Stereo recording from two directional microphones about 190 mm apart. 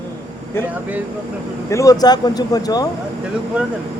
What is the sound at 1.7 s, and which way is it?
Speech, 15° left (ahead or behind).